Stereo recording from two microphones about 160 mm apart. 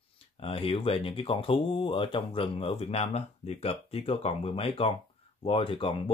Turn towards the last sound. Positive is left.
turn(degrees=35)  # may be behind; listen again after turning